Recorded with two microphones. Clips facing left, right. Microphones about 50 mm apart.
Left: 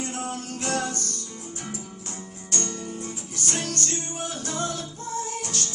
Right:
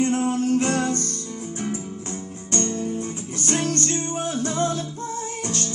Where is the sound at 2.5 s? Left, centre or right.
Right.